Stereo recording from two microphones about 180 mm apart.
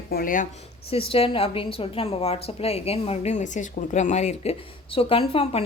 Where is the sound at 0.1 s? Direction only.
55° left (ahead or behind).